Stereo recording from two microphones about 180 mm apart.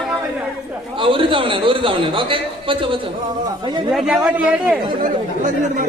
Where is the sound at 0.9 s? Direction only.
30° right (ahead or behind).